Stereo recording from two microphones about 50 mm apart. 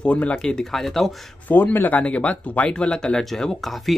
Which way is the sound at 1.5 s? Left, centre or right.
Left.